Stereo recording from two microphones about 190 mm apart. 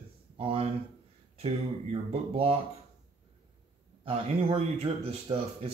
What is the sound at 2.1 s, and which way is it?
Speech, 30° right (ahead or behind).